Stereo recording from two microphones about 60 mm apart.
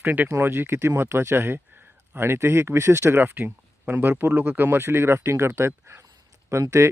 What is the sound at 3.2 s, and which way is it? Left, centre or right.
Speech, right.